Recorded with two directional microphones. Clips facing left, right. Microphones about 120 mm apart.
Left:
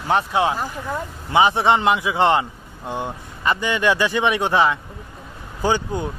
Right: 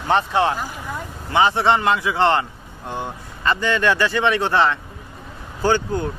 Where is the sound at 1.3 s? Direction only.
15° left (ahead or behind).